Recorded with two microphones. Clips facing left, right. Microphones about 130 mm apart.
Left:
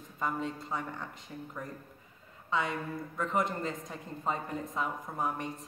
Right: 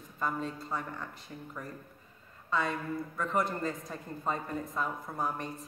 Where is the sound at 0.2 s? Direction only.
20° left (ahead or behind).